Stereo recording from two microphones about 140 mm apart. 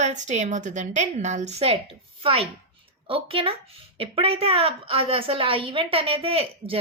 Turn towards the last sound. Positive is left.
turn(degrees=-45)  # may be behind; listen again after turning